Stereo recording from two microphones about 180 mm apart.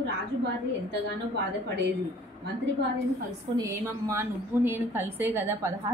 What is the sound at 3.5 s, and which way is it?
A woman's voice, 15° right (ahead or behind).